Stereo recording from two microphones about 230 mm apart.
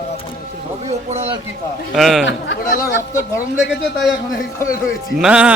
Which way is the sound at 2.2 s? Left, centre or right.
Left.